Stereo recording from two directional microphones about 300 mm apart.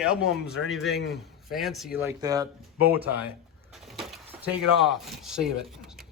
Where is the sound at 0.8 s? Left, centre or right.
Left.